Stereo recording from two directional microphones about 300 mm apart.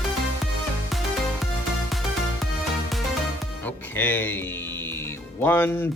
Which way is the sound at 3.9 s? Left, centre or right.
Centre.